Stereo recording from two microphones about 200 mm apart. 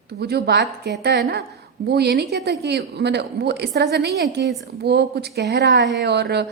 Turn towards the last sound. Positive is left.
turn(degrees=-55)  # may be behind; listen again after turning